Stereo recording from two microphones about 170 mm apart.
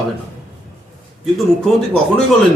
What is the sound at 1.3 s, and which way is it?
Speech, 5° left (ahead or behind).